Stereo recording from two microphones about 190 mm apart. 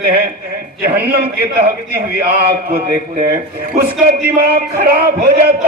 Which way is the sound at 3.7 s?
50° right (ahead or behind).